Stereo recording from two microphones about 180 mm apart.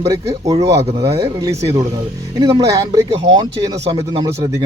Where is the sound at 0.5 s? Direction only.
20° right (ahead or behind).